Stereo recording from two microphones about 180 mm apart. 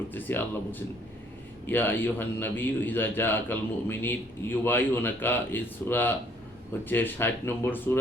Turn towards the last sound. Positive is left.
turn(degrees=10)  # may be behind; listen again after turning